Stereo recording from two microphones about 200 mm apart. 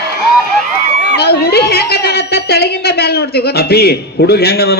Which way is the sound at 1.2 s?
55° left (ahead or behind).